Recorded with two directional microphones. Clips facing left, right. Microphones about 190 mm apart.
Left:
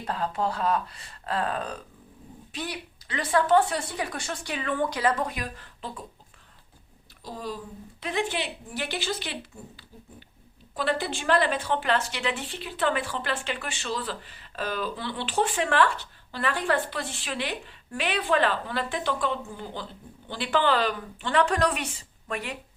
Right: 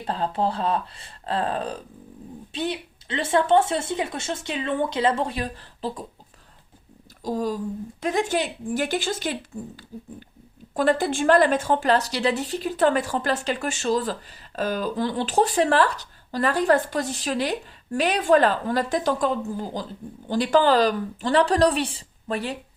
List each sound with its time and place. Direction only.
0.0 s speech: 30° right (ahead or behind)
7.2 s a woman's voice: 45° right (ahead or behind)